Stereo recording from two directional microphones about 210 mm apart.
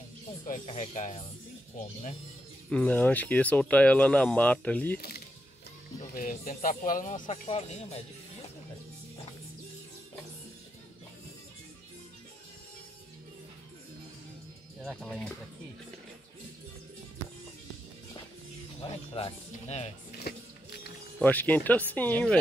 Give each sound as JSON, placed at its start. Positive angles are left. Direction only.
{"t": 0.7, "sound": "speech", "side_deg": 35}
{"t": 2.7, "sound": "speech", "side_deg": 5}
{"t": 4.9, "sound": "speech", "side_deg": 45}
{"t": 14.9, "sound": "speech", "side_deg": 5}
{"t": 18.8, "sound": "speech", "side_deg": 25}
{"t": 20.1, "sound": "music", "side_deg": 50}
{"t": 21.2, "sound": "speech", "side_deg": 10}